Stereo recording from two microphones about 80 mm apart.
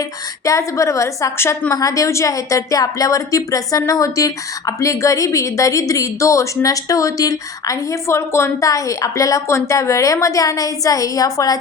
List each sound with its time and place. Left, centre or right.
0.4 s a woman's voice: left